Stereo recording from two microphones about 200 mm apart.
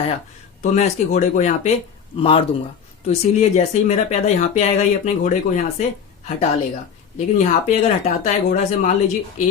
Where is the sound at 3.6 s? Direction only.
35° left (ahead or behind).